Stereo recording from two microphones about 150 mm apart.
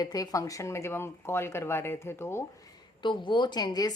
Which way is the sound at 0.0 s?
25° left (ahead or behind).